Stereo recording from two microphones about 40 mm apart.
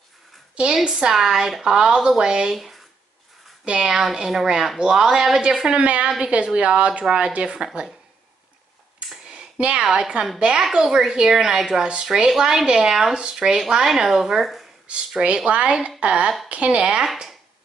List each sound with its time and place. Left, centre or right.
0.8 s speech: centre
2.5 s speech: centre
3.6 s speech: right
4.0 s speech: centre; by 6.0 s right
6.0 s speech: centre
6.3 s speech: right
7.4 s speech: centre
9.2 s a sound: right
9.9 s speech: right
11.9 s speech: right
12.3 s speech: centre
13.8 s speech: centre
14.9 s a woman's voice: right
17.0 s speech: centre